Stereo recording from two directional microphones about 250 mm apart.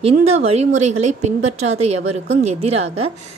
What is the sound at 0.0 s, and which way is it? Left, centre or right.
A woman's voice, right.